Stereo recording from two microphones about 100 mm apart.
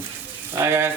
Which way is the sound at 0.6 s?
25° right (ahead or behind).